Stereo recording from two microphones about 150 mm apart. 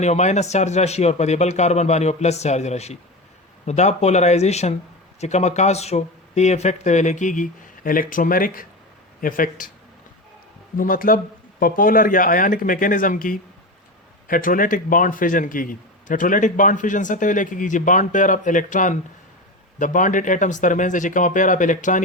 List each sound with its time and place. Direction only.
0.0 s speech: 50° left (ahead or behind); by 9.7 s 65° left (ahead or behind)
10.8 s a man's voice: 65° left (ahead or behind)